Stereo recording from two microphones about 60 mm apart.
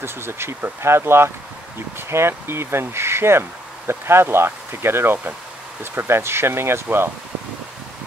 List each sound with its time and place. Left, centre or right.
0.0 s speech: right